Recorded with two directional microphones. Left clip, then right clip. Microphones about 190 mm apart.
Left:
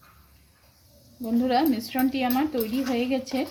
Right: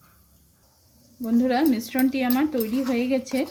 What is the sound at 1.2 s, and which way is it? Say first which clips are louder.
Speech: right 1 dB; 25° right (ahead or behind).